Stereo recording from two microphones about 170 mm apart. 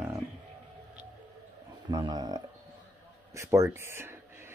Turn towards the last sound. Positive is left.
turn(degrees=-15)  # may be behind; listen again after turning